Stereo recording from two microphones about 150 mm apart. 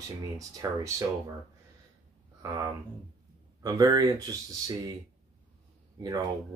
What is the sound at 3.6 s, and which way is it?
Speech, 25° right (ahead or behind).